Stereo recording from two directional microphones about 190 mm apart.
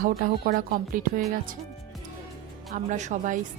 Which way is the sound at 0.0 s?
50° right (ahead or behind).